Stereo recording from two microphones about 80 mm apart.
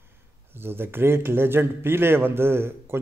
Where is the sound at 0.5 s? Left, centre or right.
Right.